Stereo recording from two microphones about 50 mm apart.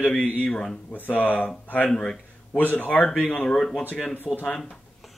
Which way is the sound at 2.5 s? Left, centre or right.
Left.